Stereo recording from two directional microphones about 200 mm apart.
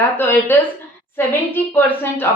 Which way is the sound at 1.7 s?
10° left (ahead or behind).